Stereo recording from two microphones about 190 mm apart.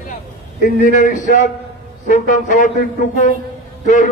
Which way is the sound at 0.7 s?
40° left (ahead or behind).